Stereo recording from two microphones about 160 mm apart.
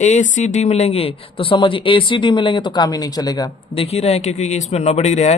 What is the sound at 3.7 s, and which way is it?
Speech, 40° left (ahead or behind).